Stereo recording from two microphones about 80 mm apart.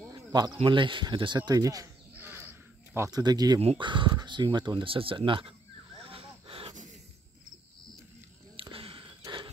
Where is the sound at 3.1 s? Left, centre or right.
Right.